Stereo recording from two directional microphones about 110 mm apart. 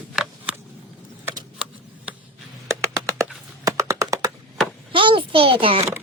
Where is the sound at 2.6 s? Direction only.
30° right (ahead or behind).